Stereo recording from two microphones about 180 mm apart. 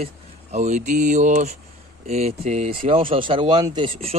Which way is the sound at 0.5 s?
40° right (ahead or behind).